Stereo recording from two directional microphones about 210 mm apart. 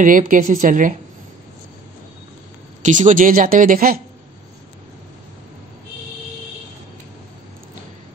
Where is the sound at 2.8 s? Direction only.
35° right (ahead or behind).